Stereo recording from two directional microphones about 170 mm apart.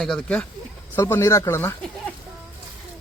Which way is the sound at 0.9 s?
15° left (ahead or behind).